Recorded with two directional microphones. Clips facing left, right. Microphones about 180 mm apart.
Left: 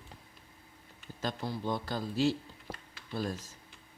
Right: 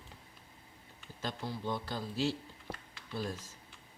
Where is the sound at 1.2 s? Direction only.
40° left (ahead or behind).